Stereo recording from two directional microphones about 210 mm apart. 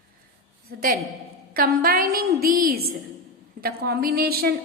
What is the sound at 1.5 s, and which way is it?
A woman's voice, 45° right (ahead or behind).